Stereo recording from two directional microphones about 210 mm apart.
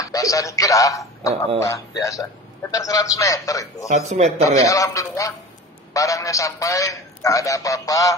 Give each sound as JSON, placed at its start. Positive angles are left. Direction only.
{"t": 0.0, "sound": "a man's voice", "side_deg": 15}
{"t": 3.9, "sound": "speech", "side_deg": -35}
{"t": 4.4, "sound": "a man's voice", "side_deg": 15}